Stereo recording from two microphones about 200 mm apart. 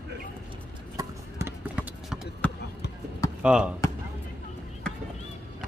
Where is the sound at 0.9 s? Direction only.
15° right (ahead or behind).